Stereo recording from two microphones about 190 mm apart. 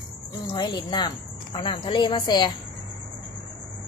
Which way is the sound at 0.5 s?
25° left (ahead or behind).